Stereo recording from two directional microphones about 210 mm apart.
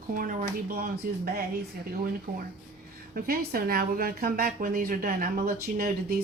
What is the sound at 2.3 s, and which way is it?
Speech, 45° right (ahead or behind).